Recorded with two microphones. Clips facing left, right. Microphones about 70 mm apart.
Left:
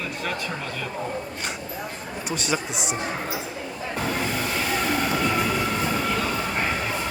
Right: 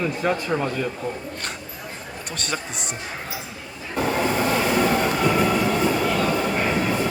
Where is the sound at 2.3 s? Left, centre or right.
Centre.